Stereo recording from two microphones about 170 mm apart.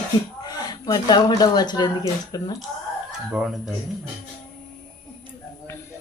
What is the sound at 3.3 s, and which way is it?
Speech, 5° right (ahead or behind).